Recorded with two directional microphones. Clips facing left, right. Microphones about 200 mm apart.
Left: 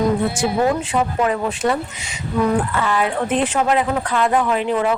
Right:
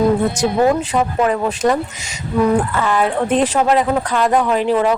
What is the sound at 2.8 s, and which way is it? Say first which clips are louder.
Speech: right 3 dB; 40° right (ahead or behind).